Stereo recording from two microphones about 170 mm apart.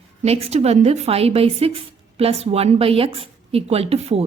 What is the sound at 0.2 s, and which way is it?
A woman's voice, 35° right (ahead or behind).